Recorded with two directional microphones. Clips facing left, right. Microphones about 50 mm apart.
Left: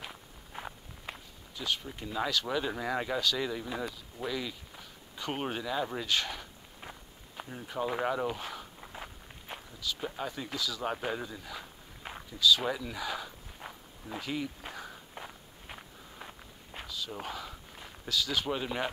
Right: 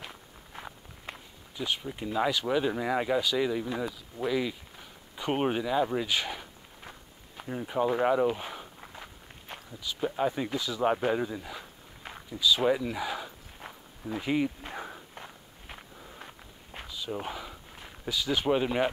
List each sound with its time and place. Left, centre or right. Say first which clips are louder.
0.0 s walk: right 1 dB; centre
1.6 s speech: right 3 dB; centre
6.8 s walk: left 1 dB; centre
7.4 s speech: right 8 dB; centre
8.0 s a sound: right 6 dB; centre
8.9 s walk: left 1 dB; centre
9.7 s a sound: even; centre
10.0 s speech: right 12 dB; centre
12.3 s walk: right 2 dB; centre
14.2 s speech: right 8 dB; right
14.7 s walk: right 4 dB; right
15.1 s walk: even; centre
16.8 s a sound: right 4 dB; centre